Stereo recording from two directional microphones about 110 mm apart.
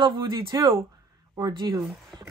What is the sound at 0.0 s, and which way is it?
Speech, 45° right (ahead or behind).